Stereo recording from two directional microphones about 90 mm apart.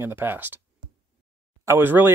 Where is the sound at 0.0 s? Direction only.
25° right (ahead or behind).